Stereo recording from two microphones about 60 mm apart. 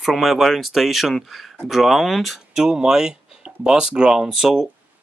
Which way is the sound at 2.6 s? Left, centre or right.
Centre.